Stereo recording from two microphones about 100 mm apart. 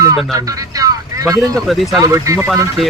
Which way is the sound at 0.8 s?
35° right (ahead or behind).